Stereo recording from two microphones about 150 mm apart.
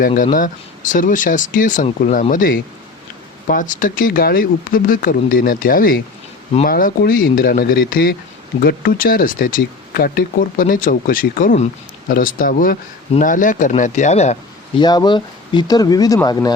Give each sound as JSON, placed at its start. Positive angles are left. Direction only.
{"t": 0.1, "sound": "speech", "side_deg": 45}
{"t": 0.3, "sound": "speech", "side_deg": 65}
{"t": 8.6, "sound": "speech", "side_deg": 75}
{"t": 14.8, "sound": "speech", "side_deg": 30}